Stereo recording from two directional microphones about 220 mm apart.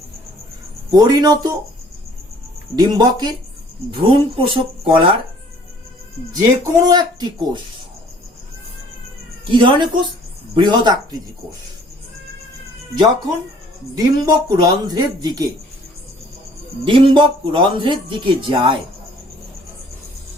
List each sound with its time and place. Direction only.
0.9 s speech: 15° right (ahead or behind)
2.7 s speech: 20° right (ahead or behind)
6.8 s speech: 20° right (ahead or behind)
9.5 s speech: 20° right (ahead or behind)
13.9 s speech: 15° right (ahead or behind)
16.8 s speech: 20° right (ahead or behind)